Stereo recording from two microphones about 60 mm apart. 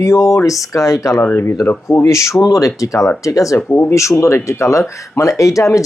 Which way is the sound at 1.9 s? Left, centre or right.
Left.